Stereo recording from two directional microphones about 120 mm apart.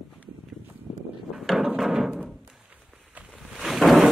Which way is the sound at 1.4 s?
Centre (ahead or behind).